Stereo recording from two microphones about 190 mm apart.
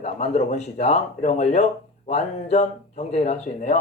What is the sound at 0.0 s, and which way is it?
A man's voice, 35° left (ahead or behind).